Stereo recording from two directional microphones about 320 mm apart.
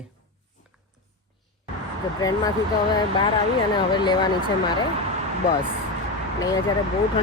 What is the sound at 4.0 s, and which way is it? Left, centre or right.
Speech, centre.